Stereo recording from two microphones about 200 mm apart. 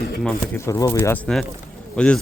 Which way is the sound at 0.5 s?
15° left (ahead or behind).